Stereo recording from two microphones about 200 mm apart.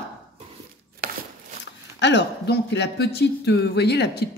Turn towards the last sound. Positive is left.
turn(degrees=55)  # may be behind; listen again after turning